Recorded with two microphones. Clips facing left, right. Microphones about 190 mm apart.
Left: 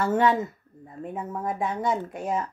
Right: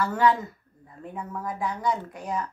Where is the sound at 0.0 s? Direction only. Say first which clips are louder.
Left 1 dB; 25° left (ahead or behind).